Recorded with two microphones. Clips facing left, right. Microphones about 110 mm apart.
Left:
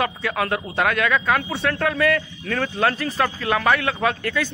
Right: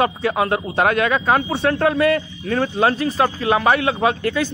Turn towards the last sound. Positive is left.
turn(degrees=-25)  # may be behind; listen again after turning